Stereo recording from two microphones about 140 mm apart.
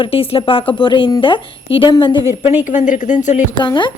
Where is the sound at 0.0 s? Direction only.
40° left (ahead or behind).